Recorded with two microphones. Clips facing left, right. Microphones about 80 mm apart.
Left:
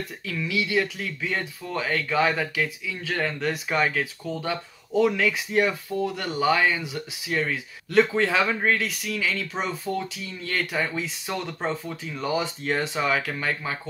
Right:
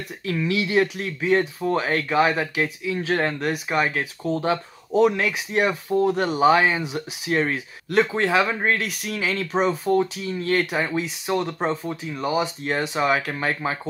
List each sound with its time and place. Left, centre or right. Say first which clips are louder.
0.3 s speech: right 4 dB; right
3.6 s speech: even; centre
5.9 s speech: right 10 dB; right
7.2 s speech: right 4 dB; right
7.9 s speech: right 1 dB; right
9.0 s speech: right 2 dB; right
10.7 s speech: right 3 dB; right